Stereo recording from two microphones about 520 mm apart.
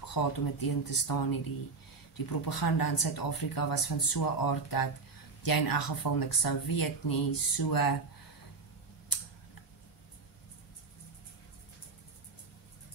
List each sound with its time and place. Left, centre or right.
0.0 s speech: left
9.1 s camera: left